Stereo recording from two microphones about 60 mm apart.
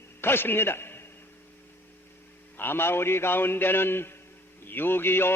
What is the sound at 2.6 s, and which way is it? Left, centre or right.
A man's voice, left.